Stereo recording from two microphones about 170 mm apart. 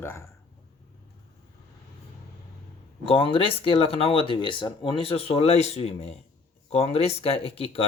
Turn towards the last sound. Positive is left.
turn(degrees=35)  # may be behind; listen again after turning